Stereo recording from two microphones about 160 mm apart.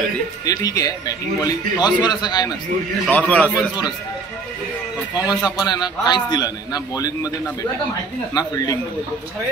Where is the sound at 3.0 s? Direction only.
10° left (ahead or behind).